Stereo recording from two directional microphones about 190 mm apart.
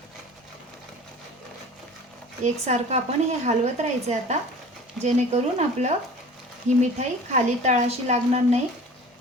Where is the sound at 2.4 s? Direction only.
35° right (ahead or behind).